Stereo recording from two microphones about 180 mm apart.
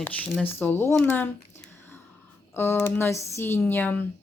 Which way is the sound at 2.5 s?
10° left (ahead or behind).